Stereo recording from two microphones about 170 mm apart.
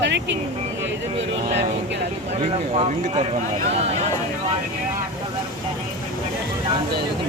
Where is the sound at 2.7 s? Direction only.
35° right (ahead or behind).